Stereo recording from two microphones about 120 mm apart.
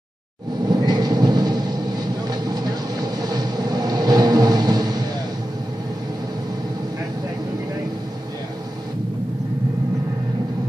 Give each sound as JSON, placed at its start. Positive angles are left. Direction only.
{"t": 0.7, "sound": "train", "side_deg": -35}
{"t": 2.2, "sound": "vehicle", "side_deg": -35}